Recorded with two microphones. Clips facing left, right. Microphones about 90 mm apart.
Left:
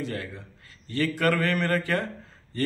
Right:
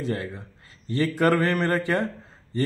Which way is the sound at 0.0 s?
30° right (ahead or behind).